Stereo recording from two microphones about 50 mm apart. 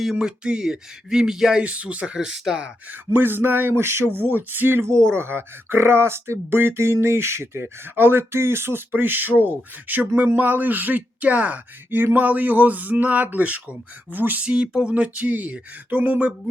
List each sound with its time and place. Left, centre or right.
0.0 s speech: centre
1.6 s speech: right
2.1 s speech: centre
3.1 s speech: right
4.3 s speech: right
11.9 s speech: right
14.4 s speech: centre; by 16.1 s right